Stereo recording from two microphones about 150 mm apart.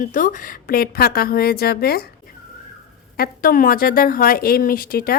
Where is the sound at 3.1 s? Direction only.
80° left.